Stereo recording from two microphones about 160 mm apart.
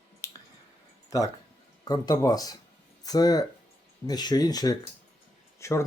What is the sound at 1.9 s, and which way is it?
Speech, 25° left (ahead or behind).